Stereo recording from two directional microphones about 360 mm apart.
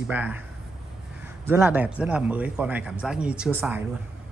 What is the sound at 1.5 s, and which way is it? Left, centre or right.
Speech, centre.